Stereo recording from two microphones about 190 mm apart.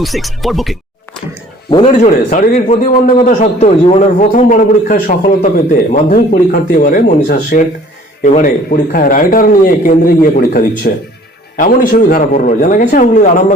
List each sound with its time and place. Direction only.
0.0 s speech: centre (ahead or behind)
1.9 s a man's voice: 45° left (ahead or behind)